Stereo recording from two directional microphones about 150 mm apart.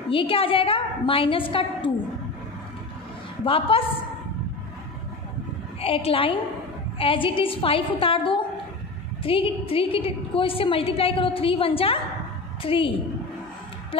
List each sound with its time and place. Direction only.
0.1 s a woman's voice: 35° left (ahead or behind)
3.4 s a woman's voice: 40° left (ahead or behind)
5.8 s a woman's voice: 40° left (ahead or behind)